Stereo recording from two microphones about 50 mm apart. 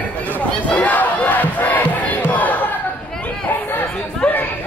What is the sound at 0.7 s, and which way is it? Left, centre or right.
Crowd, left.